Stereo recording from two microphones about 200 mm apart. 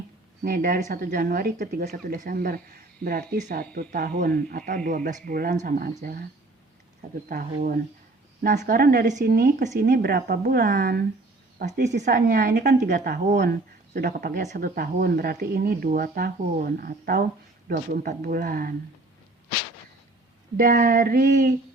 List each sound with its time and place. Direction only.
0.4 s speech: 45° right (ahead or behind)
7.3 s speech: 45° right (ahead or behind)
9.7 s speech: 55° right (ahead or behind)
11.6 s speech: 35° right (ahead or behind)
11.9 s speech: 55° right (ahead or behind)
20.6 s speech: 45° right (ahead or behind)